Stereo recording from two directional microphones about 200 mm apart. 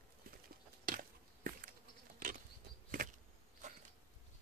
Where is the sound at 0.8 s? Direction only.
45° right (ahead or behind).